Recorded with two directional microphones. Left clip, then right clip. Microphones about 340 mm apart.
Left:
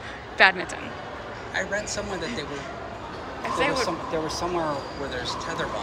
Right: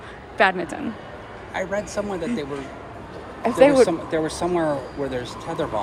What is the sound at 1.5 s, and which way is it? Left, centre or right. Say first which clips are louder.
Speech: right 3 dB; centre.